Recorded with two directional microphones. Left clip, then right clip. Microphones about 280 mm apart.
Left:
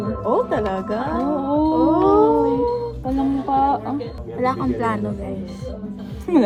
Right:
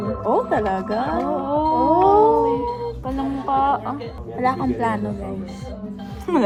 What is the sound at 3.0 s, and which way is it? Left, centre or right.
Speech, right.